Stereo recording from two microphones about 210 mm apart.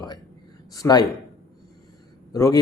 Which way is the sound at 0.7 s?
15° left (ahead or behind).